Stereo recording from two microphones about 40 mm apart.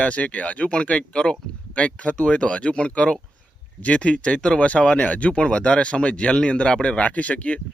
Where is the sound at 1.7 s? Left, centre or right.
Left.